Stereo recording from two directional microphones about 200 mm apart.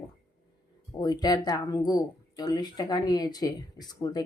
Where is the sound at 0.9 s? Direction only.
20° left (ahead or behind).